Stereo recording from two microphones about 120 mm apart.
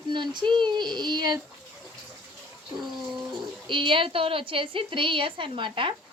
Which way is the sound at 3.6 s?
45° right (ahead or behind).